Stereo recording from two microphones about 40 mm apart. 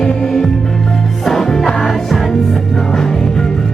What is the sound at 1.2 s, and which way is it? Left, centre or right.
Music, centre.